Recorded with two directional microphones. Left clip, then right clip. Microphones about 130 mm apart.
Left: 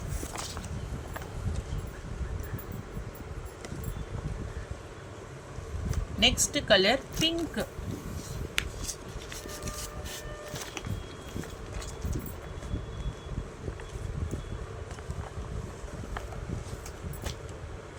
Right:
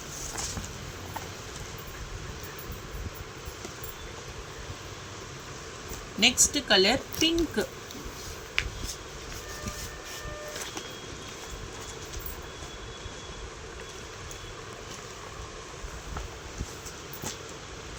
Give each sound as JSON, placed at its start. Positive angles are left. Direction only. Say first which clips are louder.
{"t": 6.1, "sound": "speech", "louder": "right 2 dB", "side_deg": 60}